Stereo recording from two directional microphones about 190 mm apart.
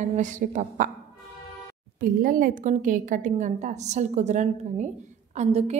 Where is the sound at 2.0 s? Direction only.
45° right (ahead or behind).